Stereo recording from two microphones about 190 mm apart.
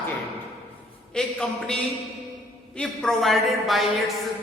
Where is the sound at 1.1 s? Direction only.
5° left (ahead or behind).